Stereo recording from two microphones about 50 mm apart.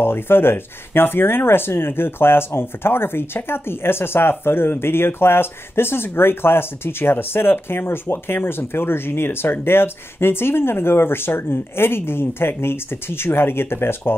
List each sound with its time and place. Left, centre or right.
0.0 s speech: left